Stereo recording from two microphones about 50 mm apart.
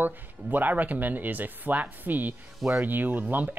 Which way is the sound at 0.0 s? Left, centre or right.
Right.